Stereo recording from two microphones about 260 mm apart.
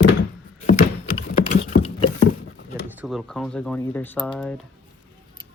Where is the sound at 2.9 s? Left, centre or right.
Centre.